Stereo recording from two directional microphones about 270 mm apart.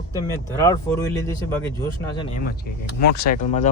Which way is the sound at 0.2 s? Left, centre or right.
Centre.